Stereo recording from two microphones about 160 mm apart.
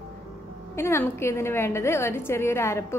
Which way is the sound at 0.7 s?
15° left (ahead or behind).